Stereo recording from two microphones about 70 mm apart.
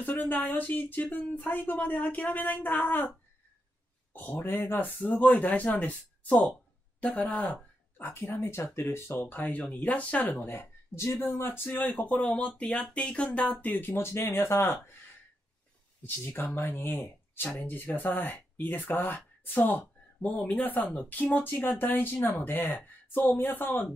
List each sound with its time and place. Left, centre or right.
0.0 s speech: left
4.1 s speech: left
16.0 s speech: left